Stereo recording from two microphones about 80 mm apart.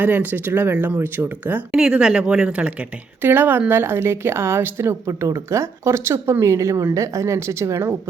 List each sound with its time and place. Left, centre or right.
0.0 s speech: right
1.7 s speech: centre; by 7.9 s right